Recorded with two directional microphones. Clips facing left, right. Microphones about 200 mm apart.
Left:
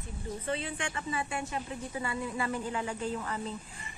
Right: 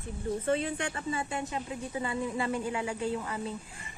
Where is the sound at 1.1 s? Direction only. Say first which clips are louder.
Right 1 dB; 25° right (ahead or behind).